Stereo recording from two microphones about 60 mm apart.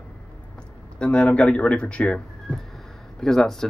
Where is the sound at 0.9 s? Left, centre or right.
Centre.